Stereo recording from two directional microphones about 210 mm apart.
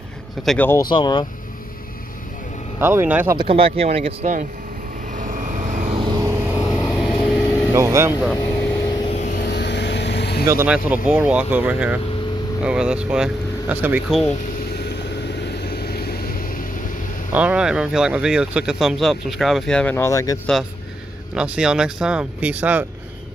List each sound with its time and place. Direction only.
0.4 s speech: 5° left (ahead or behind)
0.8 s speech: 20° left (ahead or behind)
2.8 s speech: 10° right (ahead or behind)
3.3 s speech: 25° right (ahead or behind)
5.1 s vehicle: 35° right (ahead or behind); by 6.6 s 10° right (ahead or behind)
6.7 s vehicle: centre (ahead or behind)
7.7 s speech: 15° right (ahead or behind)
8.4 s vehicle: 10° left (ahead or behind)
9.1 s vehicle: 35° left (ahead or behind)
9.4 s vehicle: 55° left (ahead or behind)
10.5 s speech: 10° right (ahead or behind)
15.6 s vehicle: 50° left (ahead or behind)
17.3 s speech: 5° right (ahead or behind); by 20.3 s 15° left (ahead or behind)
21.4 s speech: 5° right (ahead or behind)